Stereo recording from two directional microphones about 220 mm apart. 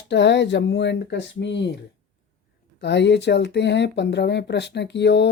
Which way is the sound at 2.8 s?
50° left (ahead or behind).